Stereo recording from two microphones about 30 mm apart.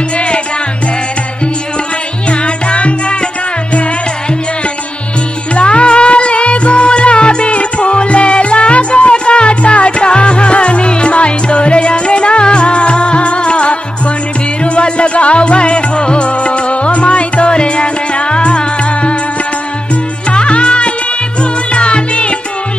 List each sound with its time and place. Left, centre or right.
2.2 s music: left
5.5 s music: left
20.2 s music: left